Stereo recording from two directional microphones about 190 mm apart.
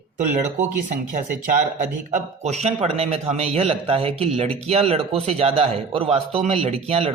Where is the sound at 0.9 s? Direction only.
45° right (ahead or behind).